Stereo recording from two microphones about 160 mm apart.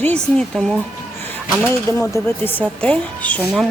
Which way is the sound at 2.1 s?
15° left (ahead or behind).